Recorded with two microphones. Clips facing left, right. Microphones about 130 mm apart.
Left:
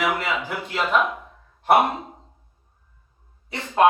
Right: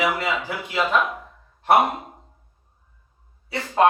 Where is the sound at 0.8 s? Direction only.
Centre (ahead or behind).